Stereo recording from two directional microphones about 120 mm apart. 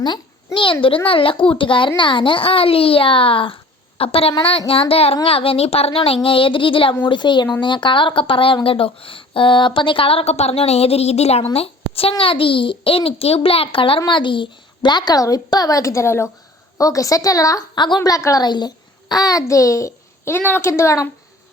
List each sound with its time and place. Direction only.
0.0 s a child's voice: 40° left (ahead or behind); by 21.1 s 25° left (ahead or behind)